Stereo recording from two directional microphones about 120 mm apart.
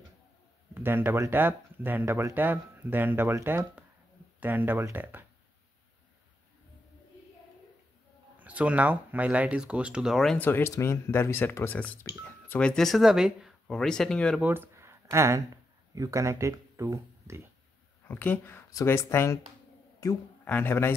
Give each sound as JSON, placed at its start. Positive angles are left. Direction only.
{"t": 0.7, "sound": "speech", "side_deg": -20}
{"t": 8.4, "sound": "speech", "side_deg": -10}
{"t": 10.3, "sound": "speech", "side_deg": 15}
{"t": 14.4, "sound": "speech", "side_deg": -15}
{"t": 18.0, "sound": "speech", "side_deg": 15}
{"t": 18.7, "sound": "speech", "side_deg": 25}
{"t": 20.4, "sound": "speech", "side_deg": 15}